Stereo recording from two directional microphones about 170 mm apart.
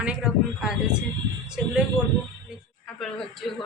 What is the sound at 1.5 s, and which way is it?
Speech, 5° right (ahead or behind).